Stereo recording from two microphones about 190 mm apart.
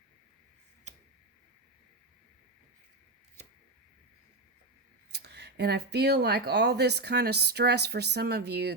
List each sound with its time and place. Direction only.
5.1 s speech: 60° right (ahead or behind)